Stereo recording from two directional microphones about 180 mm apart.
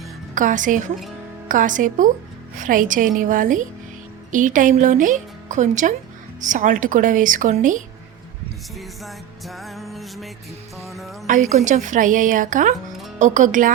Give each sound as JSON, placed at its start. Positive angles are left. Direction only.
{"t": 0.3, "sound": "speech", "side_deg": -45}
{"t": 9.0, "sound": "music", "side_deg": 0}
{"t": 11.3, "sound": "speech", "side_deg": -45}